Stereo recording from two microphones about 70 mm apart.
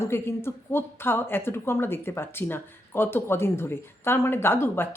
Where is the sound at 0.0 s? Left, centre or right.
Left.